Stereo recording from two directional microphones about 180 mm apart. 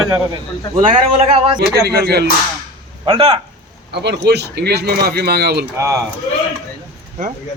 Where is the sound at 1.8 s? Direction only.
60° right (ahead or behind).